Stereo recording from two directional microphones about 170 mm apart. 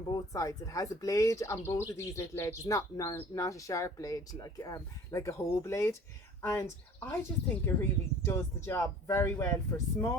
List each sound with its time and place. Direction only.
0.1 s speech: 20° left (ahead or behind)